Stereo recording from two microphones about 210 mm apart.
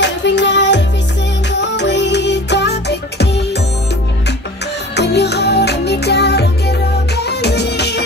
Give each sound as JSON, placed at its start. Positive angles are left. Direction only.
{"t": 0.0, "sound": "music", "side_deg": 55}
{"t": 4.9, "sound": "music", "side_deg": 55}